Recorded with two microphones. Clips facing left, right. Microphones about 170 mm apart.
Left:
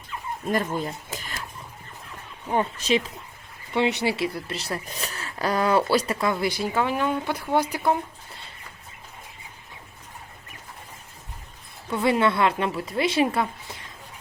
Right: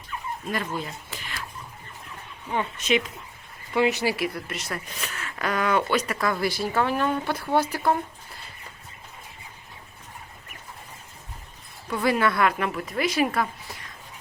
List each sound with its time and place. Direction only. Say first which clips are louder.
0.4 s speech: left 5 dB; 45° left (ahead or behind)
0.9 s a sound: left 4 dB; 45° left (ahead or behind)
2.5 s speech: left 2 dB; 35° left (ahead or behind); by 7.8 s 15° left (ahead or behind)
12.0 s a woman's voice: left 1 dB; 25° left (ahead or behind)